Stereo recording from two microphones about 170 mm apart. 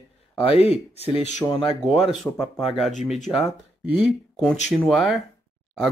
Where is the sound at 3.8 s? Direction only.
5° right (ahead or behind).